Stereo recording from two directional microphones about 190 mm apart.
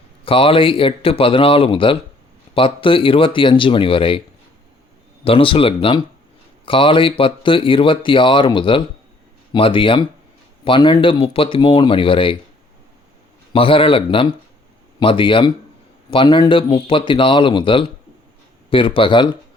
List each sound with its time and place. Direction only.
0.3 s speech: 30° left (ahead or behind)
5.2 s speech: 30° left (ahead or behind)
13.5 s speech: 30° left (ahead or behind)